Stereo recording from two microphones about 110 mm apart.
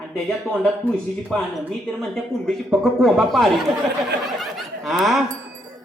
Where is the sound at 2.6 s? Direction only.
Centre (ahead or behind).